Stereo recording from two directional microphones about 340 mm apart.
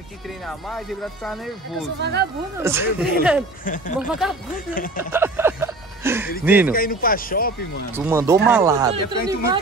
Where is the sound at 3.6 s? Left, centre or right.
Left.